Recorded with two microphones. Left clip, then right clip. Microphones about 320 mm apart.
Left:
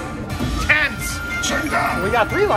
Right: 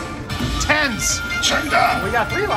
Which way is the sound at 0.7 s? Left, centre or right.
Centre.